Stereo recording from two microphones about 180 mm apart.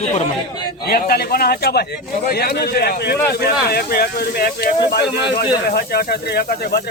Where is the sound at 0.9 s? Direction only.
60° left (ahead or behind).